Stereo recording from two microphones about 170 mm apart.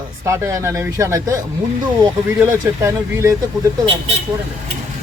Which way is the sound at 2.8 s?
15° right (ahead or behind).